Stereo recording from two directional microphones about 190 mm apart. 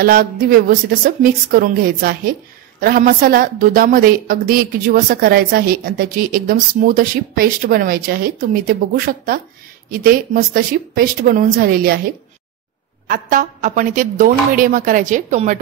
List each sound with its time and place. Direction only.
0.0 s a woman's voice: 50° right (ahead or behind)
13.1 s a woman's voice: 45° right (ahead or behind)